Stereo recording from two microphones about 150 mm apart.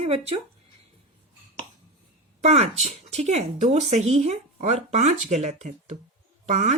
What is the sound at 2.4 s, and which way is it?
Speech, 45° right (ahead or behind).